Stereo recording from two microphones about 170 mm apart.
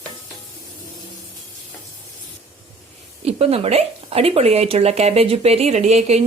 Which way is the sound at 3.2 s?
35° right (ahead or behind).